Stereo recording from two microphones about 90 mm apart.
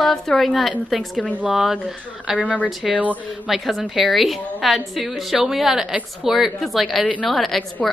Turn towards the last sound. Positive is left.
turn(degrees=0)  # may be behind; listen again after turning